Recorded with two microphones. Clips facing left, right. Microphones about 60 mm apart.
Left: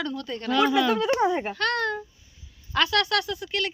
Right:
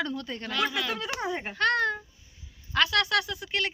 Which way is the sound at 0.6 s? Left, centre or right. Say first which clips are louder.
Left 9 dB; centre.